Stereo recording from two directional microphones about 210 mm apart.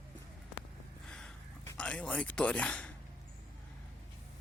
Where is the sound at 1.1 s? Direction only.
5° left (ahead or behind).